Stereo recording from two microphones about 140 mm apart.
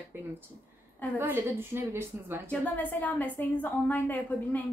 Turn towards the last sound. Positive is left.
turn(degrees=10)  # may be behind; listen again after turning